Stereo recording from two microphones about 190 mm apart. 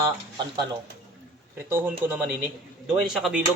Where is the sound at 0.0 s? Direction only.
20° right (ahead or behind).